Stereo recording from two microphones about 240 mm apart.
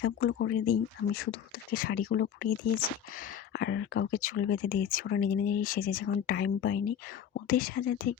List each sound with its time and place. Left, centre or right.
0.0 s speech: left